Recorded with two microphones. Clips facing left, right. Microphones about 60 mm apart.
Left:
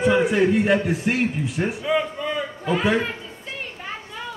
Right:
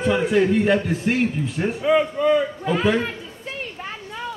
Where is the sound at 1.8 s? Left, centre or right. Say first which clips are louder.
Right 8 dB; centre.